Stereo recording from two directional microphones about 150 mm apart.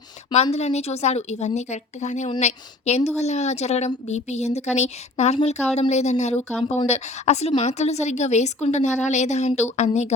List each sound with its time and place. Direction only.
0.5 s speech: 45° left (ahead or behind)